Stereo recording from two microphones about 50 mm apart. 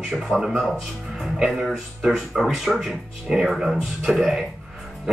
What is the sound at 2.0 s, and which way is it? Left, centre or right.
Speech, centre.